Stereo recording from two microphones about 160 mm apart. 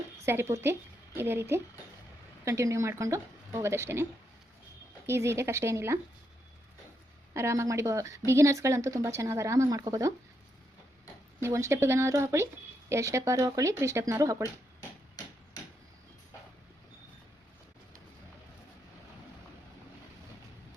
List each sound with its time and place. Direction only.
0.2 s a woman's voice: 15° right (ahead or behind)
5.0 s a woman's voice: 15° right (ahead or behind)
7.3 s speech: 20° right (ahead or behind)
11.3 s a woman's voice: 15° right (ahead or behind)